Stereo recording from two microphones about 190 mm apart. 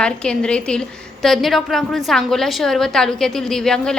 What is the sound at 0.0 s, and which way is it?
A woman's voice, 5° left (ahead or behind).